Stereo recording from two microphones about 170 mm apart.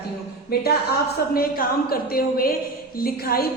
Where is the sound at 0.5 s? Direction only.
65° left (ahead or behind).